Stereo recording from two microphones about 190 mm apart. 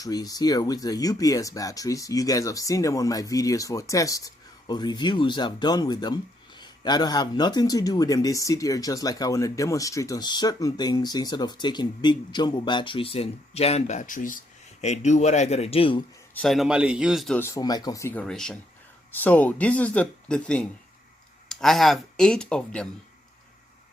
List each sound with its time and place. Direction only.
0.0 s speech: 20° left (ahead or behind)
16.3 s speech: 5° left (ahead or behind)
17.4 s speech: 20° left (ahead or behind)